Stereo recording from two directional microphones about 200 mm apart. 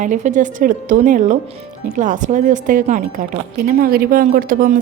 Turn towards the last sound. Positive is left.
turn(degrees=-45)  # may be behind; listen again after turning